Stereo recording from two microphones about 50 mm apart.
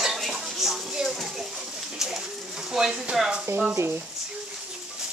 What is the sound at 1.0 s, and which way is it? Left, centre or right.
Pigeon, centre.